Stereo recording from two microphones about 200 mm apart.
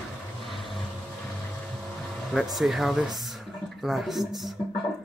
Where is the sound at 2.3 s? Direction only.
Centre (ahead or behind).